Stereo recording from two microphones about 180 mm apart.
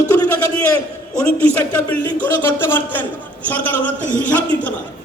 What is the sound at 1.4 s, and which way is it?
A man's voice, 10° left (ahead or behind).